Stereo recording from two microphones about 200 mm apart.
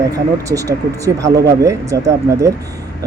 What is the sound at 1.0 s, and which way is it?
Speech, 15° right (ahead or behind).